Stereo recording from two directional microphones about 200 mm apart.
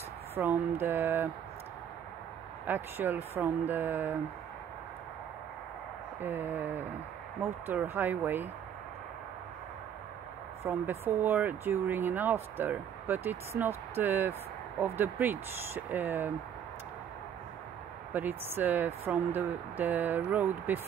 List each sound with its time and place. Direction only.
0.4 s speech: 10° right (ahead or behind)
2.6 s speech: 10° right (ahead or behind)
6.2 s speech: 10° right (ahead or behind)
10.6 s speech: 10° right (ahead or behind)
18.1 s speech: 10° right (ahead or behind)